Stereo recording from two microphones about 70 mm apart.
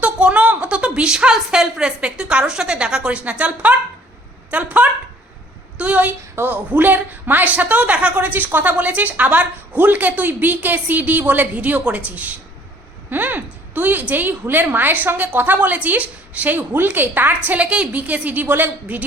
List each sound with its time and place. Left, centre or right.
0.0 s a woman's voice: centre